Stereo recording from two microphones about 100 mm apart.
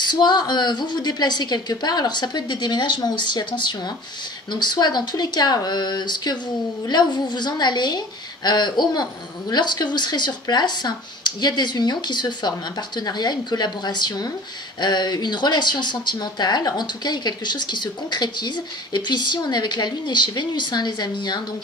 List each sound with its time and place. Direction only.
0.0 s speech: 45° left (ahead or behind)